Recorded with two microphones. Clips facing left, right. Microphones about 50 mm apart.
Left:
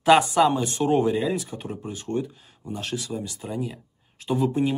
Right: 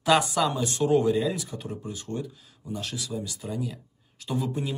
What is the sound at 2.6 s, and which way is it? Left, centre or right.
Speech, left.